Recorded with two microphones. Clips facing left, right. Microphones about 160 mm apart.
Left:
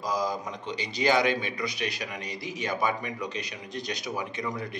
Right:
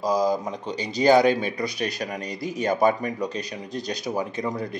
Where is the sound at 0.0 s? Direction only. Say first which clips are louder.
Right 7 dB; 35° right (ahead or behind).